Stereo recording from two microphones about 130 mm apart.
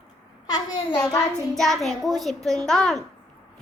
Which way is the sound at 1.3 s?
Centre (ahead or behind).